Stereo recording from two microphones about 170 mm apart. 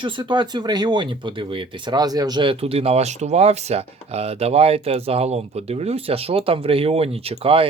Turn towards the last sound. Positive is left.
turn(degrees=-35)  # may be behind; listen again after turning